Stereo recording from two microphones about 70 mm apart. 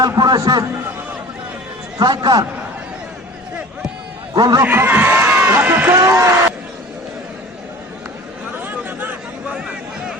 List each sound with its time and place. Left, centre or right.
0.0 s a man's voice: right
2.0 s a man's voice: right
4.4 s speech: right
4.6 s speech: right
5.9 s speech: right
8.6 s chatter: right
9.6 s a sound: centre